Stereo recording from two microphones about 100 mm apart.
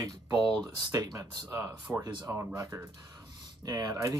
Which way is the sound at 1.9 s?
20° right (ahead or behind).